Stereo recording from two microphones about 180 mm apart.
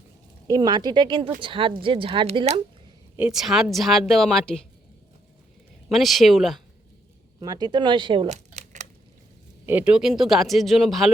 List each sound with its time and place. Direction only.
0.4 s speech: 20° right (ahead or behind)
3.2 s speech: 5° right (ahead or behind)
5.9 s speech: centre (ahead or behind)
7.3 s speech: 20° right (ahead or behind); by 8.8 s 40° right (ahead or behind)
9.6 s speech: 10° right (ahead or behind)